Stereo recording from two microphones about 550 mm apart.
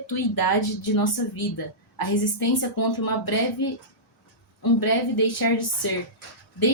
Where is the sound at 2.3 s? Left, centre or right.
Left.